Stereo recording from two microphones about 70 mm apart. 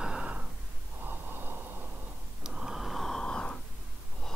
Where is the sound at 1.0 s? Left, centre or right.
Right.